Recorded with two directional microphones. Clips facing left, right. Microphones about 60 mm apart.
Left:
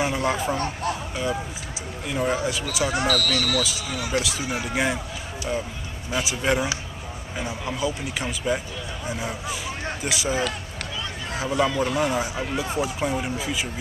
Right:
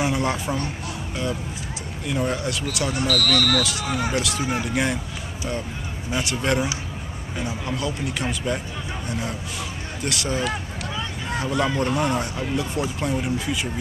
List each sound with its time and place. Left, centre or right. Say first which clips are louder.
0.0 s speech: even; centre
2.0 s speech: even; centre
2.9 s speech: left 1 dB; left
3.2 s speech: right 3 dB; right
4.1 s speech: right 2 dB; centre
6.1 s a man's voice: even; centre